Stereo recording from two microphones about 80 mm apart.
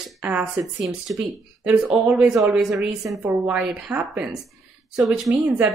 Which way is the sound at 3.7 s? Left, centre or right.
Centre.